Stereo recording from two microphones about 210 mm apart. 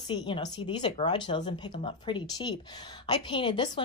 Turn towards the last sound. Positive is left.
turn(degrees=20)  # may be behind; listen again after turning